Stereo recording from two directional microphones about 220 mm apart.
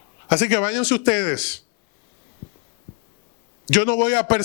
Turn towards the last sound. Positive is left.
turn(degrees=20)  # may be behind; listen again after turning